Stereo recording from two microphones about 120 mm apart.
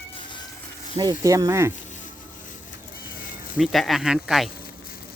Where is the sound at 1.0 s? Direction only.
30° right (ahead or behind).